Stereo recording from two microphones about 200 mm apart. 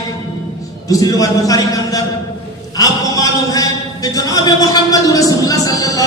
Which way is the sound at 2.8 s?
15° left (ahead or behind).